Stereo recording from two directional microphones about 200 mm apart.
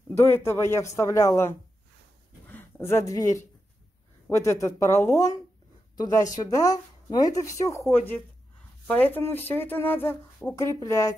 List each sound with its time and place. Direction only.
0.2 s speech: 15° left (ahead or behind)
2.4 s a sound: 10° left (ahead or behind)
4.3 s a woman's voice: 15° left (ahead or behind)